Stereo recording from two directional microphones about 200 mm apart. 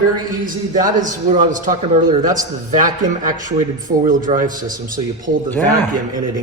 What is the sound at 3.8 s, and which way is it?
Speech, 40° right (ahead or behind).